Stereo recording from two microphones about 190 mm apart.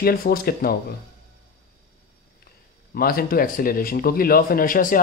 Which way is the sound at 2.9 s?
50° left (ahead or behind).